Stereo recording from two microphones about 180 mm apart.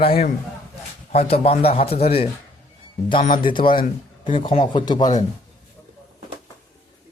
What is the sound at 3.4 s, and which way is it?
Speech, 25° left (ahead or behind).